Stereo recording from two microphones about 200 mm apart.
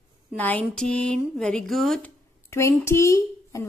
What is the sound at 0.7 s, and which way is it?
A woman's voice, 5° left (ahead or behind).